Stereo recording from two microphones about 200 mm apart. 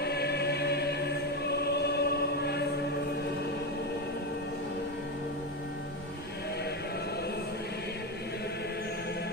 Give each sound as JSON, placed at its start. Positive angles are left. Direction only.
{"t": 0.0, "sound": "choir", "side_deg": 55}